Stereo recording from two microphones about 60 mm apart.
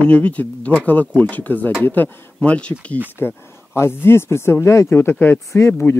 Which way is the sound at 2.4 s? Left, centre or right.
Left.